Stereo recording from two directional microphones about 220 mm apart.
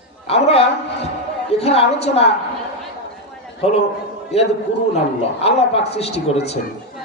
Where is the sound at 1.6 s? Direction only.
25° left (ahead or behind).